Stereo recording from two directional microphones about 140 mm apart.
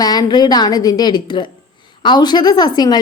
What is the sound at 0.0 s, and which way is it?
A woman's voice, 30° left (ahead or behind).